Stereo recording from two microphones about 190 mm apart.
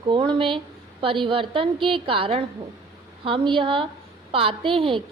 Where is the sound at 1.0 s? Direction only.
25° right (ahead or behind).